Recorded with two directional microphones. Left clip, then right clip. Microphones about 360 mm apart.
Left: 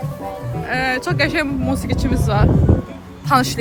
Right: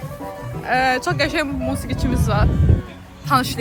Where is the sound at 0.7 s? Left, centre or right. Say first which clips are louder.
Right 2 dB; centre.